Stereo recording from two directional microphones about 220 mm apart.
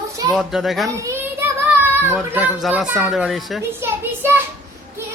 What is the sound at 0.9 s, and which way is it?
A child's voice, 15° right (ahead or behind).